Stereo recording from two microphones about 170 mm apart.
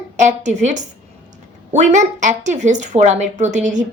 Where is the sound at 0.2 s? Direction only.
45° right (ahead or behind).